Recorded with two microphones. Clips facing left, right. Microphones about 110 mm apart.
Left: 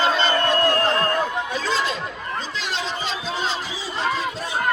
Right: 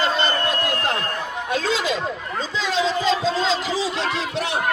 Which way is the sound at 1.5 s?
90° right.